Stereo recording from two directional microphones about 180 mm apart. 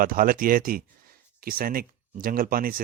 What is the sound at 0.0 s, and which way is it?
Speech, 50° right (ahead or behind).